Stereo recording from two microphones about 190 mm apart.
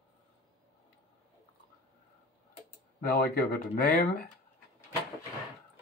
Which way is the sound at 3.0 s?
50° left (ahead or behind).